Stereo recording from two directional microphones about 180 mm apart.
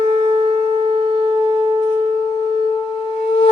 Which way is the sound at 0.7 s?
25° right (ahead or behind).